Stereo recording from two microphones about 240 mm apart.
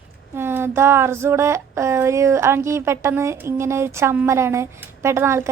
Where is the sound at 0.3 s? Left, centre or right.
Centre.